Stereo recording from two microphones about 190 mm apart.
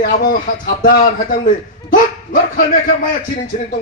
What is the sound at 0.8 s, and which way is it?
A man's voice, 45° left (ahead or behind).